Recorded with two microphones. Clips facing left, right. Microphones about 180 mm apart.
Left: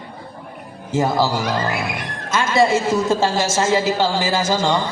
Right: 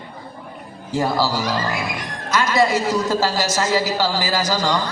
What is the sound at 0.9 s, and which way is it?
A man's voice, 20° left (ahead or behind).